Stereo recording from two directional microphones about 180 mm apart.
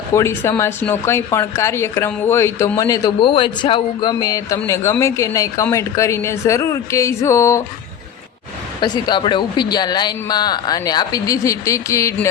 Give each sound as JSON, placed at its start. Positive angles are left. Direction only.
{"t": 0.1, "sound": "speech", "side_deg": 15}
{"t": 8.8, "sound": "a woman's voice", "side_deg": 25}